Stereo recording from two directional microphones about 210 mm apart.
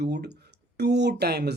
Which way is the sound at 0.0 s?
50° right (ahead or behind).